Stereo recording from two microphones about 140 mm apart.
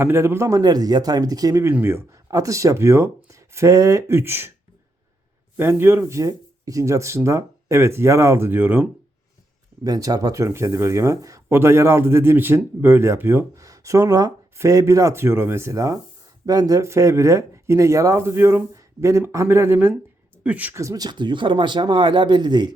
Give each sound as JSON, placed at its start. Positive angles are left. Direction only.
{"t": 0.0, "sound": "speech", "side_deg": -15}
{"t": 5.5, "sound": "speech", "side_deg": -15}
{"t": 9.8, "sound": "speech", "side_deg": -25}